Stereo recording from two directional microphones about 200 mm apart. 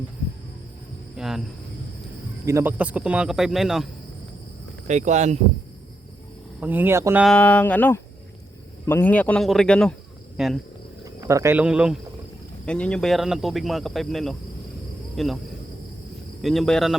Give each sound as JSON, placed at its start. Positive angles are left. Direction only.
{"t": 1.1, "sound": "a sound", "side_deg": 0}
{"t": 2.5, "sound": "speech", "side_deg": -10}
{"t": 4.9, "sound": "speech", "side_deg": -35}
{"t": 6.6, "sound": "speech", "side_deg": -10}
{"t": 7.3, "sound": "speech", "side_deg": 5}
{"t": 11.0, "sound": "speech", "side_deg": -15}
{"t": 12.6, "sound": "speech", "side_deg": 5}
{"t": 16.4, "sound": "speech", "side_deg": 0}